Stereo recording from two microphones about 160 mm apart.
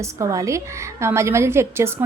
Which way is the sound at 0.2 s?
20° right (ahead or behind).